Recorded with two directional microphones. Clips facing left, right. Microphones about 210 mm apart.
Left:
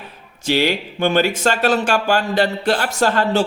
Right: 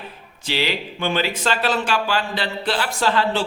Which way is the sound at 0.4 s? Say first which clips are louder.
Left 6 dB; 45° left (ahead or behind).